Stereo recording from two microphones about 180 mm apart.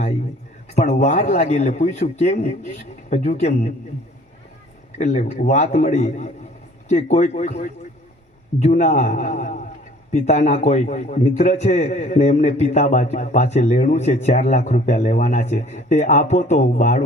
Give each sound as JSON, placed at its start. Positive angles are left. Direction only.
{"t": 0.8, "sound": "a man's voice", "side_deg": 35}
{"t": 4.9, "sound": "a man's voice", "side_deg": 40}